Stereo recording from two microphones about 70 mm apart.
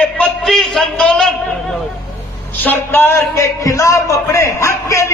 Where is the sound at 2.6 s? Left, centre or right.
Left.